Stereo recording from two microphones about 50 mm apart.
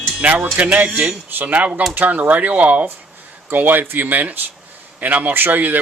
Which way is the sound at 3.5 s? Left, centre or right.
Right.